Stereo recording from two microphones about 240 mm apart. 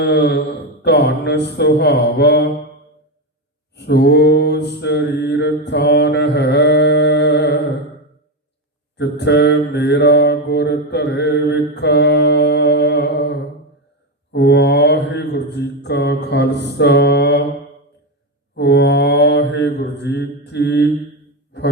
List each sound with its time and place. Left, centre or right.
0.0 s mantra: left
3.8 s mantra: left
9.0 s mantra: left
18.5 s mantra: left